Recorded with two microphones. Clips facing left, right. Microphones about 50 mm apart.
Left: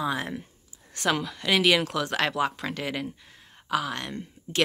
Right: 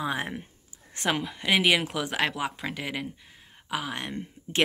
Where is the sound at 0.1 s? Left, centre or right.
Right.